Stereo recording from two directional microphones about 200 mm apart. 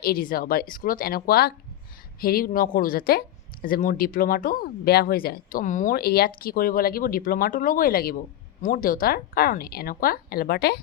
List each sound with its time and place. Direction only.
0.0 s speech: 45° left (ahead or behind)